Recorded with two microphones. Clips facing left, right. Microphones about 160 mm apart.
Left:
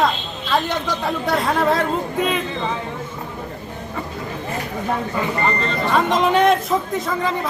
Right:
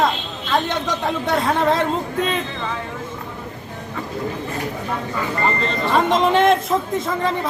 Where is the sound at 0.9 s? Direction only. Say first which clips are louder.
Even; centre (ahead or behind).